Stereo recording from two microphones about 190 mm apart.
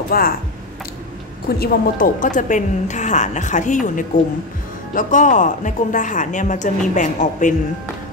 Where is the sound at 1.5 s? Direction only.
45° left (ahead or behind).